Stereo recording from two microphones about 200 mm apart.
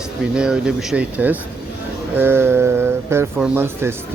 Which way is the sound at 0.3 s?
5° right (ahead or behind).